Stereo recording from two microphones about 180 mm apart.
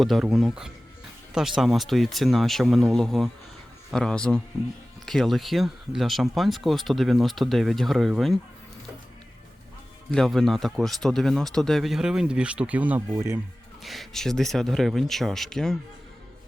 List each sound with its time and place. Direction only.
0.0 s speech: centre (ahead or behind)
10.1 s speech: 5° left (ahead or behind); by 13.4 s 15° right (ahead or behind)
13.8 s speech: centre (ahead or behind)